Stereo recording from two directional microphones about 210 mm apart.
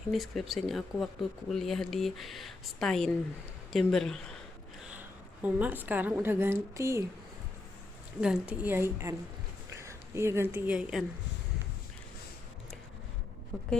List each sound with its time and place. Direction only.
0.1 s a woman's voice: centre (ahead or behind)
8.2 s a woman's voice: 5° right (ahead or behind)
13.5 s speech: centre (ahead or behind)